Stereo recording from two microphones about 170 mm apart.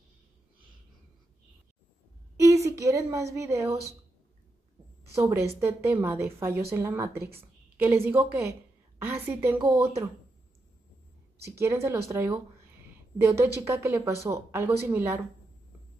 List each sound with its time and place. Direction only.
2.3 s a woman's voice: 20° right (ahead or behind)
5.1 s a woman's voice: 15° right (ahead or behind)
11.5 s a woman's voice: 15° right (ahead or behind)